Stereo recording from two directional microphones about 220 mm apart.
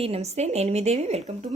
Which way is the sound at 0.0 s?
30° right (ahead or behind).